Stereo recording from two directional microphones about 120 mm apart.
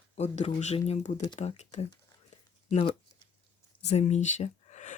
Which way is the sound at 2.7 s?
45° left (ahead or behind).